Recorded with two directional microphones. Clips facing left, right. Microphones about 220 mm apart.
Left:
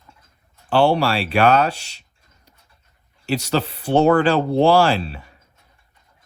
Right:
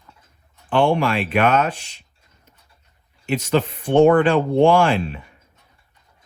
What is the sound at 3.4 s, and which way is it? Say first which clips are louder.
Speech: right 2 dB; 35° left (ahead or behind).